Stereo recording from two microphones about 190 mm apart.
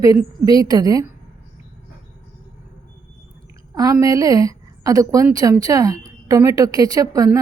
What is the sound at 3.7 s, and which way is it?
A woman's voice, 15° right (ahead or behind).